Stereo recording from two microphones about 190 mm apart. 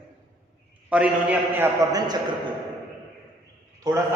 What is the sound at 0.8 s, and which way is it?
A man's voice, 5° right (ahead or behind).